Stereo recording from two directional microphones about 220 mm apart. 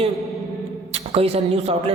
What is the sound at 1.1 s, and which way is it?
Speech, 25° right (ahead or behind).